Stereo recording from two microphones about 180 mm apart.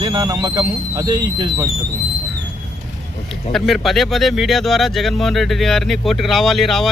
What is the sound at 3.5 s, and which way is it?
Speech, centre (ahead or behind).